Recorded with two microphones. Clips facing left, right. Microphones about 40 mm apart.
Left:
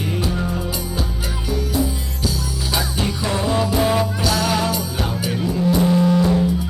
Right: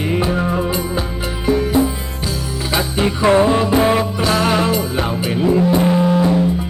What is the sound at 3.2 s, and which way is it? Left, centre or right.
Music, right.